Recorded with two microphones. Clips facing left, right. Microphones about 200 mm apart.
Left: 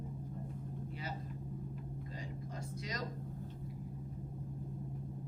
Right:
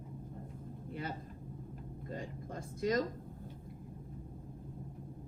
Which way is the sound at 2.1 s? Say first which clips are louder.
Right 6 dB; 50° right (ahead or behind).